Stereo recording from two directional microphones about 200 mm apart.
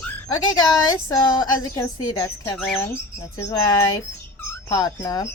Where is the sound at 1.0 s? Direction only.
20° left (ahead or behind).